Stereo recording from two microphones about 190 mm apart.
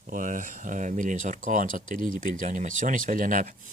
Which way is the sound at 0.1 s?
45° right (ahead or behind).